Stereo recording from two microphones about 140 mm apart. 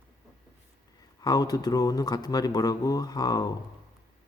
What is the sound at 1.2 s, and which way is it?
Speech, 30° left (ahead or behind).